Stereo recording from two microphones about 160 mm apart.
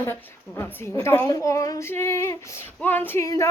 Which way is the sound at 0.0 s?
15° left (ahead or behind).